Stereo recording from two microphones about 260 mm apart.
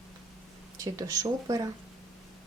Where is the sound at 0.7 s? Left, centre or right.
Centre.